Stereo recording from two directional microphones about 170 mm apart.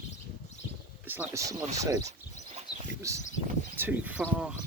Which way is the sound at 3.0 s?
15° right (ahead or behind).